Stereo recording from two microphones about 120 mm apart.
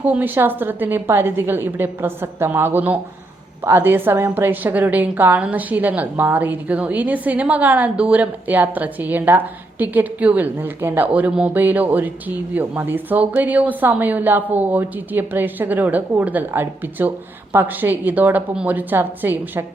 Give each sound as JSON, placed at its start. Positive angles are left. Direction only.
{"t": 0.0, "sound": "a woman's voice", "side_deg": -15}